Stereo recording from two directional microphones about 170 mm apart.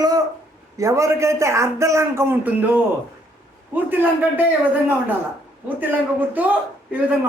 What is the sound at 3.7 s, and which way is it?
Speech, 10° right (ahead or behind).